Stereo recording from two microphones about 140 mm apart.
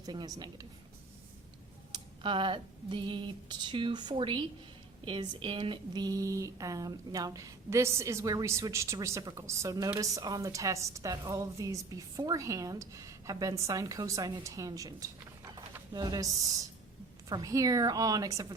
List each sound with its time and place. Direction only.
0.0 s a woman's voice: 30° right (ahead or behind)
1.9 s a sound: 35° right (ahead or behind)
5.0 s a woman's voice: 35° right (ahead or behind)